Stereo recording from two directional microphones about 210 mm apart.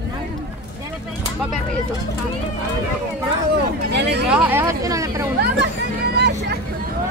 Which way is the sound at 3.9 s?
55° right (ahead or behind).